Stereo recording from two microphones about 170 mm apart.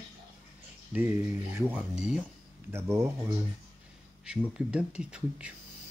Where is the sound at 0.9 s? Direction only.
15° right (ahead or behind).